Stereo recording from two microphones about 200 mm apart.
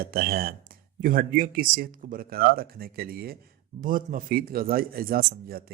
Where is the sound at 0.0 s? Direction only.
50° right (ahead or behind).